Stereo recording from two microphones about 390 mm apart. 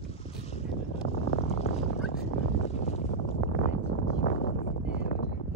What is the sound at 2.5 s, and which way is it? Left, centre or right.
Boat, centre.